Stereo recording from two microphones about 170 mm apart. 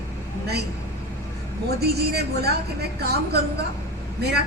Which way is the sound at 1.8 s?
70° right (ahead or behind).